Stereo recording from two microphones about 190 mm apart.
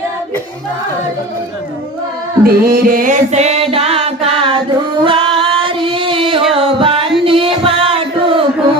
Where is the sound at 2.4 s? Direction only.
50° right (ahead or behind); by 4.6 s 30° right (ahead or behind).